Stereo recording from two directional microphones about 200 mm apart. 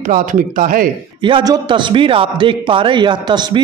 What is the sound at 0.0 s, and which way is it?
Speech, 40° right (ahead or behind).